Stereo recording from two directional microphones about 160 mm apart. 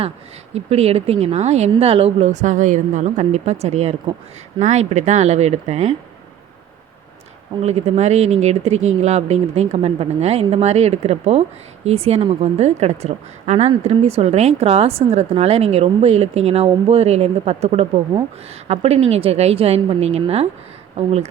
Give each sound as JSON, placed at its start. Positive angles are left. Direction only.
{"t": 0.5, "sound": "a woman's voice", "side_deg": -40}
{"t": 7.6, "sound": "a woman's voice", "side_deg": -45}